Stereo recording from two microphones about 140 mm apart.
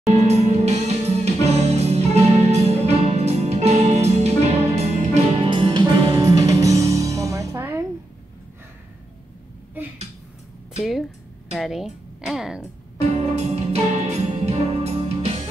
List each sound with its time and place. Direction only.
0.1 s music: 50° right (ahead or behind)
6.1 s music: 25° right (ahead or behind)
10.8 s a sound: centre (ahead or behind)
11.5 s speech: centre (ahead or behind)
13.1 s music: 50° right (ahead or behind)